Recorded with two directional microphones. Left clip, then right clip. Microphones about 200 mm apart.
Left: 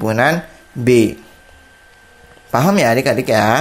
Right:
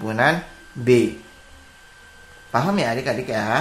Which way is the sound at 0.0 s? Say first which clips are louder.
Left 4 dB; 35° left (ahead or behind).